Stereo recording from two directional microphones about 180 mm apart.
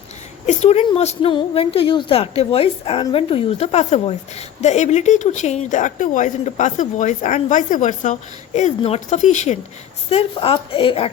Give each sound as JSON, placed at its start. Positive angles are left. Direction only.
{"t": 0.4, "sound": "a woman's voice", "side_deg": 35}